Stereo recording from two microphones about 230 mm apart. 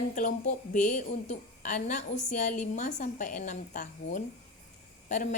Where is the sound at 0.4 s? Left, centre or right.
Left.